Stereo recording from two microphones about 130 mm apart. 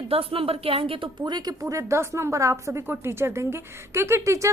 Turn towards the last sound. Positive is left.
turn(degrees=-25)  # may be behind; listen again after turning